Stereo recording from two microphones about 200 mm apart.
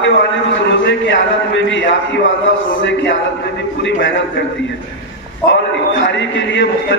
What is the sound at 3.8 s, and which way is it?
Speech, 65° left (ahead or behind).